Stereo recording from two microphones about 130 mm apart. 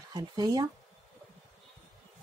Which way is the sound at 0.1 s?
30° right (ahead or behind).